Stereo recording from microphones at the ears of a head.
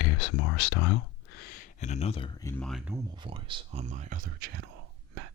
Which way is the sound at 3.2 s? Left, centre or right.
Right.